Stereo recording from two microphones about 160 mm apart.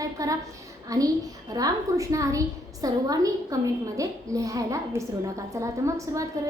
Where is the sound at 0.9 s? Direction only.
20° right (ahead or behind).